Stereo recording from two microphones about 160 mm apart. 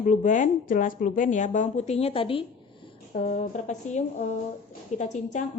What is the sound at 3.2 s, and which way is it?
Speech, 50° left (ahead or behind).